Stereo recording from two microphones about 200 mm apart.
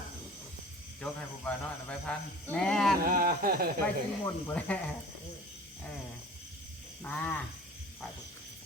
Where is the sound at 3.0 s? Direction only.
45° right (ahead or behind).